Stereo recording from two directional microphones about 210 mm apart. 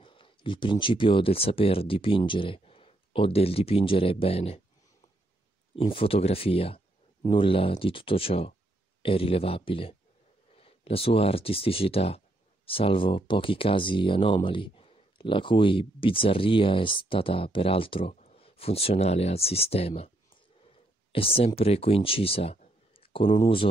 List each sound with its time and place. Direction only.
0.0 s speech: 25° left (ahead or behind)
5.8 s speech: 25° left (ahead or behind)
21.1 s speech: 25° left (ahead or behind)